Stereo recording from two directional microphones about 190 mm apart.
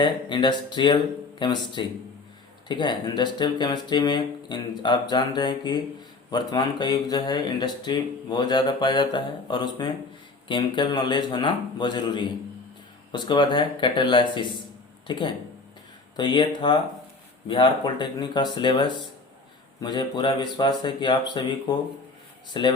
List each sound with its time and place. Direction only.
0.0 s speech: 25° left (ahead or behind)